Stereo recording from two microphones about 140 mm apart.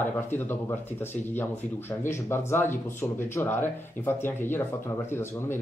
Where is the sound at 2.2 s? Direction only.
15° left (ahead or behind).